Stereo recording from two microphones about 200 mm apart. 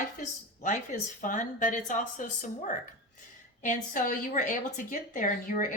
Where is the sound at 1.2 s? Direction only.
40° left (ahead or behind).